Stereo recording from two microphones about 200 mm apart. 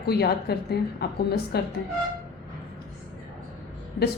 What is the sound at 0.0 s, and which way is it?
A woman's voice, 50° left (ahead or behind).